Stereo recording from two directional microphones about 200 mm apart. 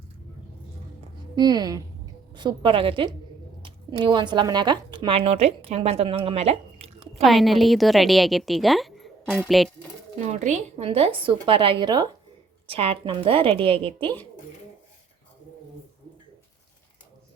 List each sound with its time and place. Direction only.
1.4 s a woman's voice: 20° right (ahead or behind)
7.2 s a woman's voice: centre (ahead or behind)
10.2 s a woman's voice: 35° right (ahead or behind)